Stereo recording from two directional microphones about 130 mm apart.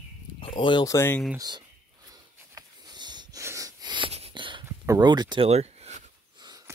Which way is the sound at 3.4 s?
25° right (ahead or behind).